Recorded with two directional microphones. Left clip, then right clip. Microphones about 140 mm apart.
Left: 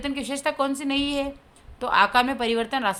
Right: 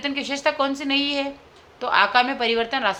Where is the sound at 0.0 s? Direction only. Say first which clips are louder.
Right 4 dB; 35° left (ahead or behind).